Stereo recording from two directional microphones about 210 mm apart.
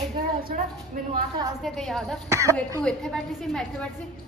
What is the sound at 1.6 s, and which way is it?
Speech, centre (ahead or behind).